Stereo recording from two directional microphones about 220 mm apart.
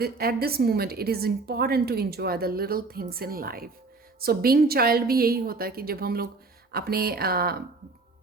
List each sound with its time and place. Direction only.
0.0 s a woman's voice: 45° right (ahead or behind)